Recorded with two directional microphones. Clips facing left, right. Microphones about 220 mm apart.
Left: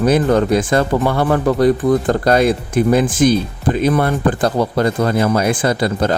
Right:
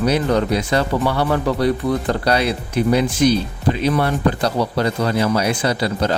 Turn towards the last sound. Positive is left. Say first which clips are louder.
# left 3 dB
turn(degrees=50)  # may be behind; listen again after turning